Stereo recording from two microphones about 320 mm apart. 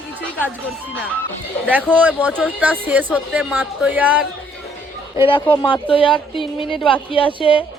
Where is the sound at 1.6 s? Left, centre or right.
Centre.